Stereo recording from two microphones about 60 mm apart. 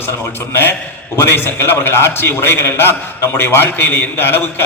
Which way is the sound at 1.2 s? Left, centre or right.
Left.